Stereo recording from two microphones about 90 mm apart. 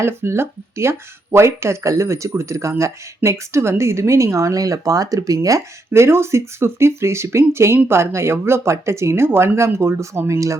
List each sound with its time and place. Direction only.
0.0 s speech: 25° right (ahead or behind)